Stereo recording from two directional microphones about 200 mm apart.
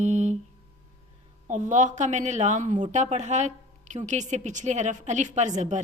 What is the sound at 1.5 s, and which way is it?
Speech, 40° right (ahead or behind).